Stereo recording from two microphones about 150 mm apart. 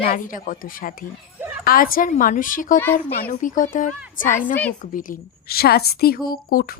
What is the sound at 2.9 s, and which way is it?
A woman's voice, 75° left (ahead or behind).